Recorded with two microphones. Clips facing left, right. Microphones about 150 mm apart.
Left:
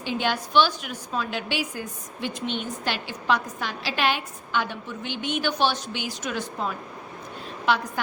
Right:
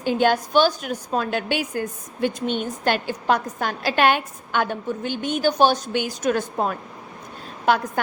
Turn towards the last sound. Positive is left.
turn(degrees=-45)  # may be behind; listen again after turning